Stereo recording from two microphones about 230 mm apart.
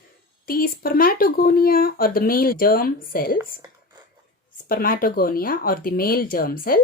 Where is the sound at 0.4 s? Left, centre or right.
Left.